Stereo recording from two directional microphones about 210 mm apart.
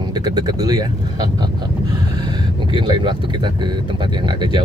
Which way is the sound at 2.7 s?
20° right (ahead or behind).